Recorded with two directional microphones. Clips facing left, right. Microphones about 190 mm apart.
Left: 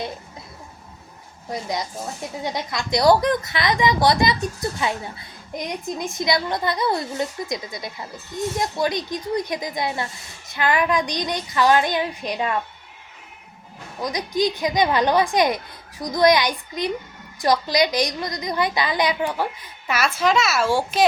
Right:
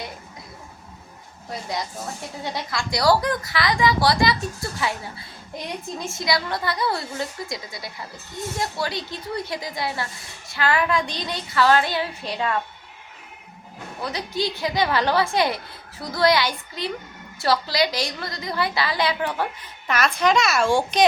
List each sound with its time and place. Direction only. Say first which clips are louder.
2.4 s a woman's voice: left 1 dB; 20° left (ahead or behind)
14.0 s a woman's voice: left 4 dB; 15° left (ahead or behind)